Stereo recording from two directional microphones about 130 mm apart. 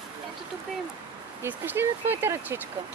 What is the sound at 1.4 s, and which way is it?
Speech, 15° right (ahead or behind).